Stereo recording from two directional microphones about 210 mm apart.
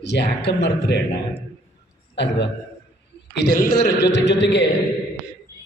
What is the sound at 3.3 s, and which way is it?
A man's voice, 50° left (ahead or behind).